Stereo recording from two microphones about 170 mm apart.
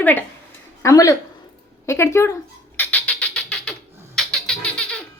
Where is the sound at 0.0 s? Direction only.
10° left (ahead or behind).